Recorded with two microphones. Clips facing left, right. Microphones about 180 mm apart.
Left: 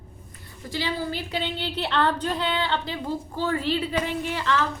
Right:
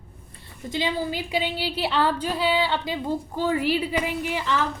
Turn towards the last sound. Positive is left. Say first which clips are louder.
# even
turn(degrees=-15)  # may be behind; listen again after turning